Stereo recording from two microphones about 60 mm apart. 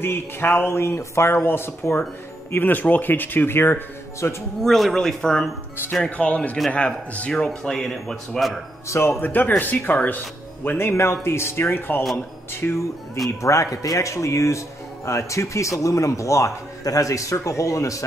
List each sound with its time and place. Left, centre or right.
0.0 s speech: left
4.6 s speech: centre
6.0 s speech: left; by 8.5 s centre
8.8 s speech: left
9.2 s speech: left
13.4 s speech: left